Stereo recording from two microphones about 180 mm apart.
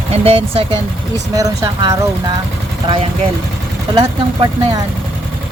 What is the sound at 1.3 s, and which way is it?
Speech, 20° right (ahead or behind).